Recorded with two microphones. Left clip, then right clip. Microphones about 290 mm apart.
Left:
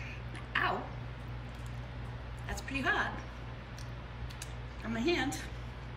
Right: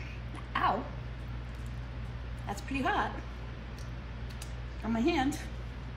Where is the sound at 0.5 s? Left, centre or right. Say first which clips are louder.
Right 3 dB; centre.